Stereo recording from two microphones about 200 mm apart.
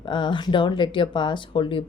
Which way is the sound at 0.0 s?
25° left (ahead or behind).